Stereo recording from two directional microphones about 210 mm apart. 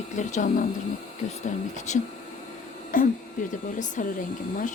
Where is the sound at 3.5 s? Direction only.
35° left (ahead or behind).